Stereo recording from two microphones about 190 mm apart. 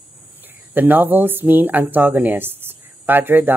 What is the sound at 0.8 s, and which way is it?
Speech, 10° right (ahead or behind).